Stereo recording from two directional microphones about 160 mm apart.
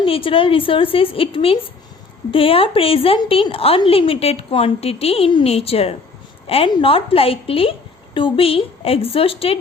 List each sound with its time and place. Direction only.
0.0 s a woman's voice: 35° left (ahead or behind)